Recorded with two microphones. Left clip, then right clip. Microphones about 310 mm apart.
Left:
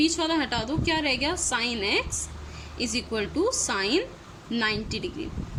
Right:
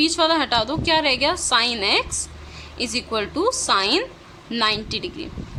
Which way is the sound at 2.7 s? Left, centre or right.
Centre.